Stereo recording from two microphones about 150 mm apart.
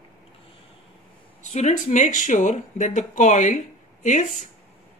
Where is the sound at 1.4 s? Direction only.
50° left (ahead or behind).